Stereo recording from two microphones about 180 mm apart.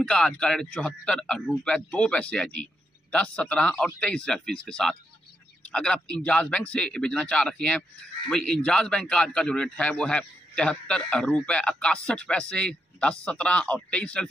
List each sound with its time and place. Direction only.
0.0 s a man's voice: 5° left (ahead or behind)